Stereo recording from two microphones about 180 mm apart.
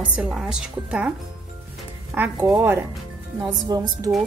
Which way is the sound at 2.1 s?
10° right (ahead or behind).